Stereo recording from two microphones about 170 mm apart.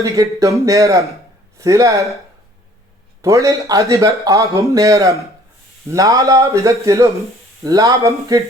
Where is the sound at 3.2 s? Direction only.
15° right (ahead or behind).